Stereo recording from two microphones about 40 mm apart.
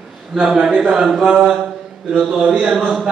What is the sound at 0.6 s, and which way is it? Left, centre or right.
Speech, right.